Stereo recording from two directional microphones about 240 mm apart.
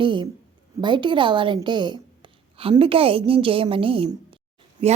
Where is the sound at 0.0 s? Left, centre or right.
Centre.